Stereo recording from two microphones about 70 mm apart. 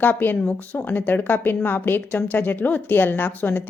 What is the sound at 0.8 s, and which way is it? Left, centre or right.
A woman's voice, left.